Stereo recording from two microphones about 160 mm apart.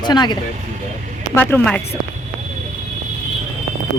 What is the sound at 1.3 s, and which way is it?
Speech, 10° left (ahead or behind).